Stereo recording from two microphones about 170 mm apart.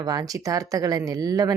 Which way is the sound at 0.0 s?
20° right (ahead or behind).